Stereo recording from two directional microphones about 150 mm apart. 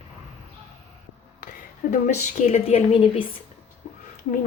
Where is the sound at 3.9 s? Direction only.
55° left (ahead or behind).